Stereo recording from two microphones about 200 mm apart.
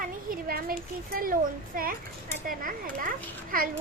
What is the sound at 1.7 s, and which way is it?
A child's voice, 45° right (ahead or behind).